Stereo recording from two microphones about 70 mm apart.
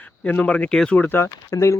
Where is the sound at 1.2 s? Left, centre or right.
Left.